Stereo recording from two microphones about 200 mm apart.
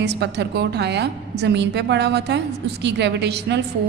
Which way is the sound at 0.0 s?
55° right (ahead or behind).